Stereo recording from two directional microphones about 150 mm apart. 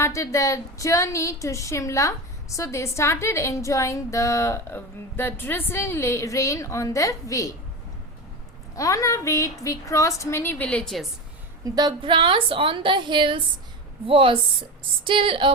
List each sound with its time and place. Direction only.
0.0 s a woman's voice: 20° left (ahead or behind)
8.7 s a woman's voice: 20° left (ahead or behind); by 11.0 s 5° left (ahead or behind)
11.6 s a woman's voice: 25° right (ahead or behind)